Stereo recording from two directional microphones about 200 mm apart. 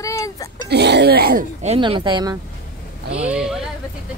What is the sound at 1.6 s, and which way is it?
Speech, 30° right (ahead or behind).